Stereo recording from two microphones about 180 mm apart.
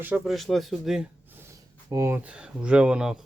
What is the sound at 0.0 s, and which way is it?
Speech, 5° right (ahead or behind).